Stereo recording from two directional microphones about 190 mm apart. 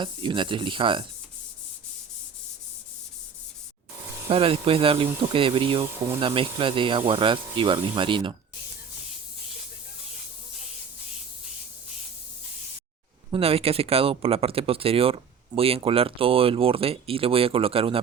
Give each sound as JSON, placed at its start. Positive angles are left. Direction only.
{"t": 0.0, "sound": "speech", "side_deg": -25}
{"t": 4.3, "sound": "speech", "side_deg": -30}
{"t": 13.3, "sound": "speech", "side_deg": -30}